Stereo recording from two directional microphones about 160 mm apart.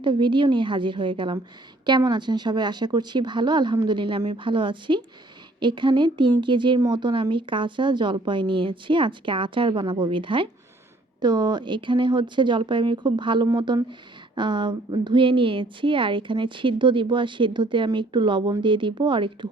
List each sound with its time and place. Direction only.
0.0 s a woman's voice: 30° right (ahead or behind)